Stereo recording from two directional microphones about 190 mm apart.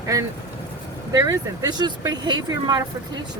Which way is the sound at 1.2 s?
20° right (ahead or behind).